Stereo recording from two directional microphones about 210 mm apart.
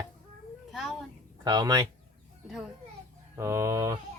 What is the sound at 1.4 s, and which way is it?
Speech, 20° right (ahead or behind).